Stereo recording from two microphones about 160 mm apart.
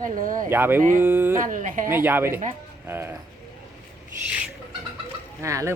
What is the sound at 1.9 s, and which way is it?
Speech, 15° right (ahead or behind).